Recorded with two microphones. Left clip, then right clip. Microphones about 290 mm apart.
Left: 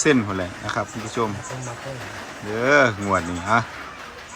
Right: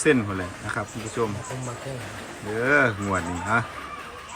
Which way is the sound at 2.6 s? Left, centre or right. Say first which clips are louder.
Left 4 dB; centre.